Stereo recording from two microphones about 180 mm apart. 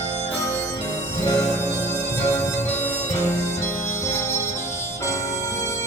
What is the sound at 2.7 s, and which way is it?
Music, 40° left (ahead or behind).